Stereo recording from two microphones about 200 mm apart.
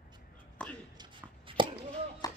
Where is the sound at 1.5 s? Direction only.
25° right (ahead or behind).